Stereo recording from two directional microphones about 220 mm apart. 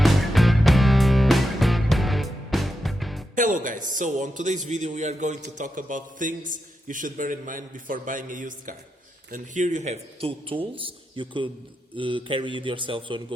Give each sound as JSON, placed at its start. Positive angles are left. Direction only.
{"t": 0.0, "sound": "music", "side_deg": 0}
{"t": 3.3, "sound": "a man's voice", "side_deg": -35}